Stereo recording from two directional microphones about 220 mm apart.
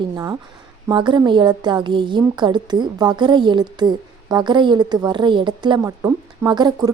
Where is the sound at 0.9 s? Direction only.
20° right (ahead or behind).